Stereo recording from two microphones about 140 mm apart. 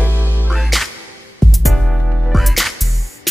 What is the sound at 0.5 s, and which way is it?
Music, centre (ahead or behind).